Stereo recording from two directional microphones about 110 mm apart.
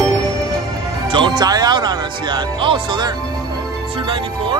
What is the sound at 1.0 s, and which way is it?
Speech, 45° right (ahead or behind).